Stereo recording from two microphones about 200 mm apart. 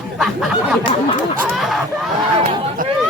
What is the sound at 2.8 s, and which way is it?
Speech, 45° right (ahead or behind).